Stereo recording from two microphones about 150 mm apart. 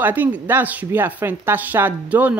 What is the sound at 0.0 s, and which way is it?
Speech, 10° right (ahead or behind).